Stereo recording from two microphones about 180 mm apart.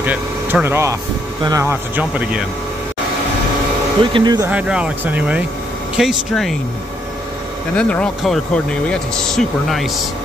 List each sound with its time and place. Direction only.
0.0 s speech: 10° right (ahead or behind)
4.0 s speech: 25° right (ahead or behind)
4.5 s speech: 5° right (ahead or behind)
7.7 s speech: 5° left (ahead or behind)